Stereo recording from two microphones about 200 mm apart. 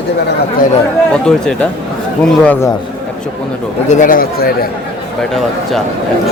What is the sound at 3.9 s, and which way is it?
Speech, 40° left (ahead or behind).